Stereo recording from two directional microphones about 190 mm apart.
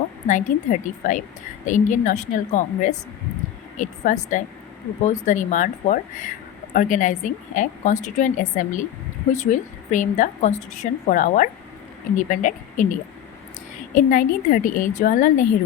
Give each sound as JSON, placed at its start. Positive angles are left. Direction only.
{"t": 0.3, "sound": "a woman's voice", "side_deg": 40}
{"t": 13.9, "sound": "a woman's voice", "side_deg": 45}